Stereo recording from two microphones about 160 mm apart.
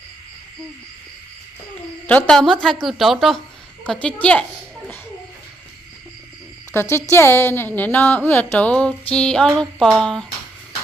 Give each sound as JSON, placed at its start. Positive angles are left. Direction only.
{"t": 2.0, "sound": "a woman's voice", "side_deg": 10}
{"t": 6.7, "sound": "a woman's voice", "side_deg": 15}